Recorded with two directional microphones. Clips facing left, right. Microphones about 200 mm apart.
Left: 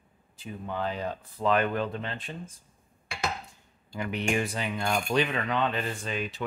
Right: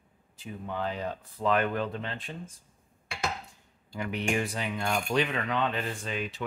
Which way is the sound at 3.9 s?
20° left (ahead or behind).